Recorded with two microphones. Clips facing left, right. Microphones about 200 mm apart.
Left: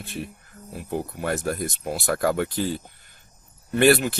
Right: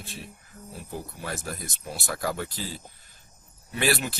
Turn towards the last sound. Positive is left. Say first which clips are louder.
# left 9 dB
turn(degrees=55)  # may be behind; listen again after turning